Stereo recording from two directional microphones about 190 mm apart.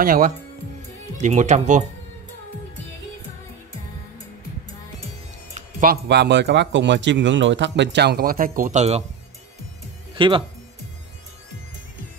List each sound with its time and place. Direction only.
0.0 s speech: 45° right (ahead or behind)
5.5 s music: 45° right (ahead or behind)
6.0 s speech: 65° right (ahead or behind); by 9.0 s 35° right (ahead or behind)
10.1 s speech: 25° right (ahead or behind)